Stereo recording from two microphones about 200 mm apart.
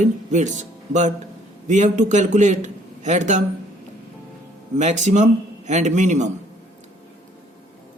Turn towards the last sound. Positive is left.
turn(degrees=-35)  # may be behind; listen again after turning